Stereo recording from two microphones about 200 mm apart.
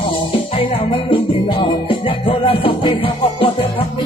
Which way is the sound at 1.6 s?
25° left (ahead or behind).